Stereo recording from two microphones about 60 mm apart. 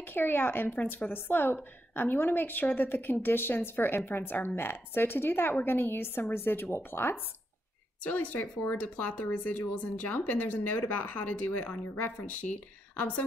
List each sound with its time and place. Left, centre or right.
0.0 s speech: left
8.0 s speech: left